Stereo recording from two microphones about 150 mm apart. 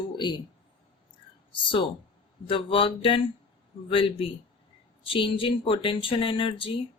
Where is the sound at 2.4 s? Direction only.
35° left (ahead or behind).